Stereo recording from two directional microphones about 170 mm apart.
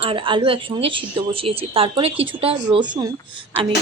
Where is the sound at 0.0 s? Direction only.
30° right (ahead or behind).